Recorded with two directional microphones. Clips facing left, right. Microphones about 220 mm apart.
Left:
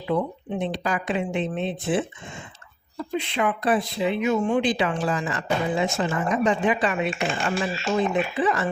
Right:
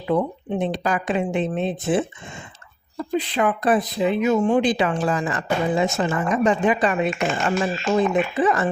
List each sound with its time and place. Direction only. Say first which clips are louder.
0.1 s speech: right 3 dB; 45° right (ahead or behind)
3.2 s speech: right 3 dB; 40° right (ahead or behind)